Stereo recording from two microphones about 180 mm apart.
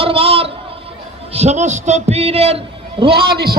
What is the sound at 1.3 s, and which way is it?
A man's voice, 35° right (ahead or behind).